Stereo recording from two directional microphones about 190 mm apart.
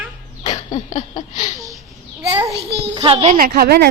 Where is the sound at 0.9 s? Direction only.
40° left (ahead or behind).